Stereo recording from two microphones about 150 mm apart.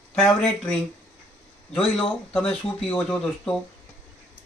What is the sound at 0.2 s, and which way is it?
Speech, 5° left (ahead or behind).